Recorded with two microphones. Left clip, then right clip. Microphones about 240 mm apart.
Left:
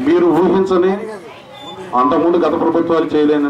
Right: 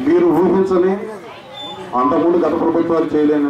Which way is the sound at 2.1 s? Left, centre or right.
Right.